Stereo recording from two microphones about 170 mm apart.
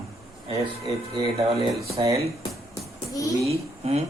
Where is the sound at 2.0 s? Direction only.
35° right (ahead or behind).